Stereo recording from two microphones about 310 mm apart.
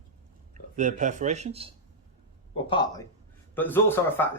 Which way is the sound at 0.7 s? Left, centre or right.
Right.